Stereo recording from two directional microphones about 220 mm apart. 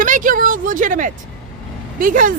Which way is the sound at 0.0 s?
35° right (ahead or behind).